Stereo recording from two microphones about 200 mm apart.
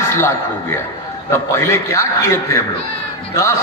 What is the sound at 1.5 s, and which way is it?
Speech, 15° left (ahead or behind).